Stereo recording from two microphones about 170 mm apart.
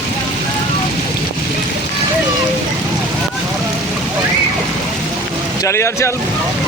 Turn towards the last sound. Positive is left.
turn(degrees=15)  # may be behind; listen again after turning